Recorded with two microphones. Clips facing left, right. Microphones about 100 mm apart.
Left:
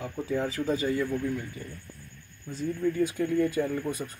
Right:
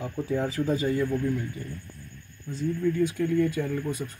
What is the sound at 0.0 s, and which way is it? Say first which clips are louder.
Speech: right 2 dB; centre (ahead or behind).